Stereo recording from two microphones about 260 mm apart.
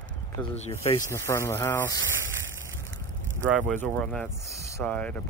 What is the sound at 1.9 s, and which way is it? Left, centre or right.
Speech, right.